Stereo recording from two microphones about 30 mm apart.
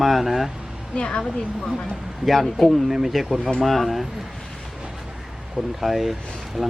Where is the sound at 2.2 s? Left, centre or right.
Centre.